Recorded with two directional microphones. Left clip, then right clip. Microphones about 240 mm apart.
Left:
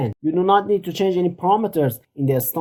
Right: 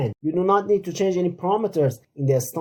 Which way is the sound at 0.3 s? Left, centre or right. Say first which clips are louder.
Left 3 dB; left.